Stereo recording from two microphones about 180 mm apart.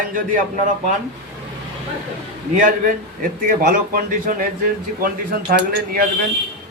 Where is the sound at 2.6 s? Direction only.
45° right (ahead or behind).